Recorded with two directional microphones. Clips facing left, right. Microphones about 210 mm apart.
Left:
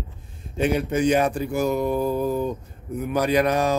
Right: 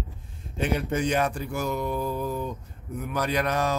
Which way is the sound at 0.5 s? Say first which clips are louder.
Left 5 dB; 10° left (ahead or behind).